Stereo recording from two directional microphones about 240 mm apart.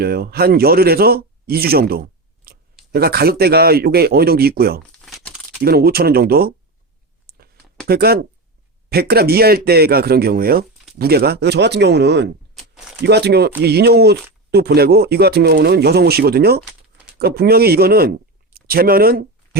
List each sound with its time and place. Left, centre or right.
0.0 s speech: right
5.0 s crumpling: centre
5.6 s speech: right
7.9 s speech: right